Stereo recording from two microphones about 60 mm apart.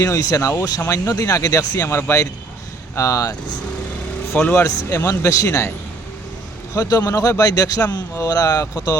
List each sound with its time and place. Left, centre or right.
0.0 s speech: left
2.9 s speech: left
4.5 s speech: left
6.7 s a man's voice: left
8.2 s a man's voice: left